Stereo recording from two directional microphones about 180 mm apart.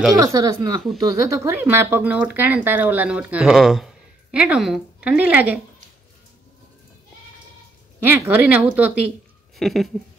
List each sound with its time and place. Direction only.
0.2 s speech: 20° right (ahead or behind)
8.0 s speech: 10° right (ahead or behind)